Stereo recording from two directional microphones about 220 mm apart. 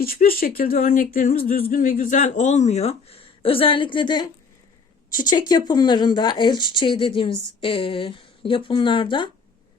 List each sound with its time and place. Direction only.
0.0 s speech: 40° left (ahead or behind); by 4.3 s 20° left (ahead or behind)
5.3 s speech: 20° left (ahead or behind)